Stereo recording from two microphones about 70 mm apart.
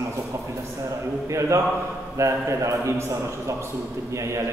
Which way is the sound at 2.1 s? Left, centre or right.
Right.